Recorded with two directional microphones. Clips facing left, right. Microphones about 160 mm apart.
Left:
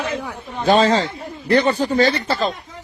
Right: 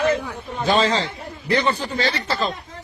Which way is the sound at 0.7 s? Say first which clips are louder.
Left 5 dB; 50° left (ahead or behind).